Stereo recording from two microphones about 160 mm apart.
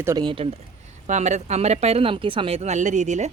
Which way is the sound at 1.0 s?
45° right (ahead or behind).